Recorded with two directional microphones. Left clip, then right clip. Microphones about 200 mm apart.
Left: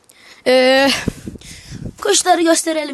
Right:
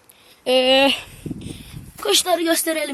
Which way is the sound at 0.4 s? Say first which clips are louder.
Left 4 dB; 40° left (ahead or behind).